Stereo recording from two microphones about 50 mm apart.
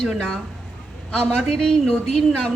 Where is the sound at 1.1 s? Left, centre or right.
Centre.